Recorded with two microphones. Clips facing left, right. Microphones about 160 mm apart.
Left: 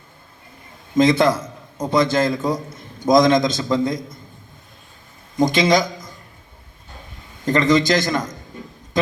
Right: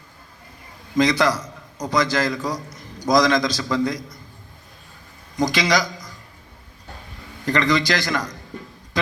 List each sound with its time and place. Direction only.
0.9 s a man's voice: 25° left (ahead or behind)
5.5 s a man's voice: 25° left (ahead or behind)
7.4 s a man's voice: 20° left (ahead or behind)